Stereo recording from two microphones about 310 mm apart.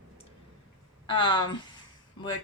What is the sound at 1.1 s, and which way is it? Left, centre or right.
Speech, centre.